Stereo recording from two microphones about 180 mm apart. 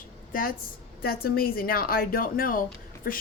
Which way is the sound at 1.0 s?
55° left (ahead or behind).